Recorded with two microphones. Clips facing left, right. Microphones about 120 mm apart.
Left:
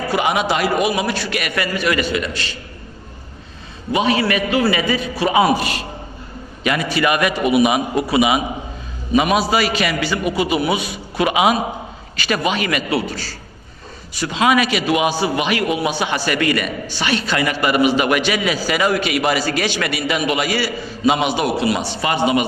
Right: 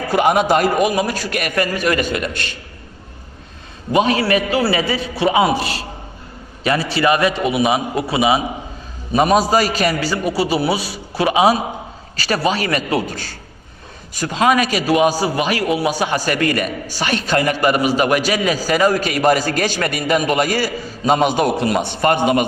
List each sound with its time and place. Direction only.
0.1 s a man's voice: 45° right (ahead or behind)
3.9 s a man's voice: 40° right (ahead or behind)
9.1 s a man's voice: 40° right (ahead or behind)